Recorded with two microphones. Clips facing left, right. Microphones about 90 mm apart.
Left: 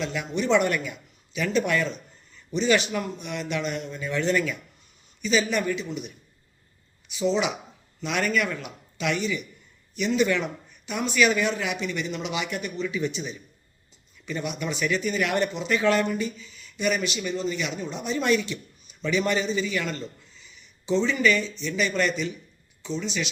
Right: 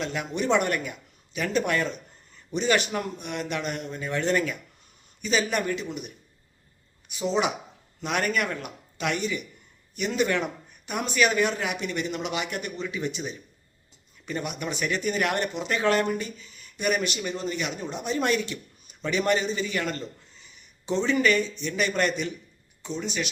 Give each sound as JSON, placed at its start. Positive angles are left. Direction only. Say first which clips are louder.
{"t": 0.0, "sound": "speech", "louder": "left 1 dB", "side_deg": -45}
{"t": 7.1, "sound": "speech", "louder": "left 1 dB", "side_deg": -40}